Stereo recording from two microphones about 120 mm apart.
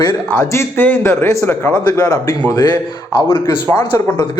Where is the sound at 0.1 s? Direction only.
20° left (ahead or behind).